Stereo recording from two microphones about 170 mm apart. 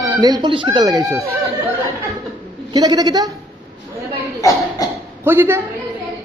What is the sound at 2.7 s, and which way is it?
Speech, 25° right (ahead or behind).